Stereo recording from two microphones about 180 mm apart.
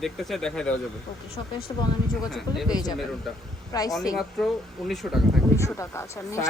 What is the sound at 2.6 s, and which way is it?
A man's voice, 20° left (ahead or behind).